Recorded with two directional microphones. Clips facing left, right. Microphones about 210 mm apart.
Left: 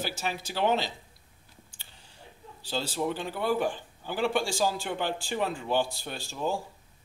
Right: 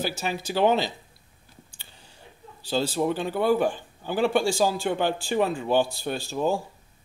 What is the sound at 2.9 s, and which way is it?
Speech, 20° right (ahead or behind).